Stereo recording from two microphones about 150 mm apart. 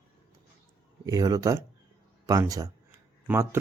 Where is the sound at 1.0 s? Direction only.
25° right (ahead or behind).